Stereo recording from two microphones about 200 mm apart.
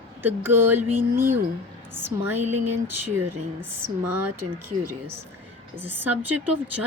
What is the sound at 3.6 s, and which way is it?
Speech, 10° right (ahead or behind).